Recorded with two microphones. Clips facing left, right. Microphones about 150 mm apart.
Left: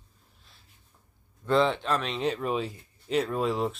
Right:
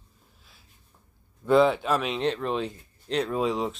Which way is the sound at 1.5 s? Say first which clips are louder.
Right 4 dB; 5° right (ahead or behind).